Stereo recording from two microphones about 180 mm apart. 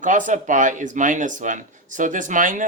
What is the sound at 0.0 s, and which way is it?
Speech, 45° right (ahead or behind).